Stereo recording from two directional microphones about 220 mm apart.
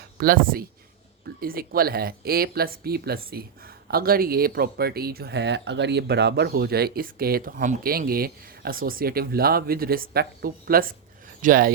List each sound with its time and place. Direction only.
0.2 s speech: 40° right (ahead or behind)